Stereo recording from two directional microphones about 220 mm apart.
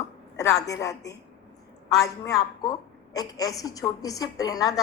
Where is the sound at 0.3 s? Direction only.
15° left (ahead or behind).